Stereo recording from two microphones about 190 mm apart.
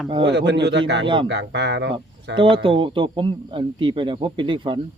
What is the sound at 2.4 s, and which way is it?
A man's voice, 25° right (ahead or behind).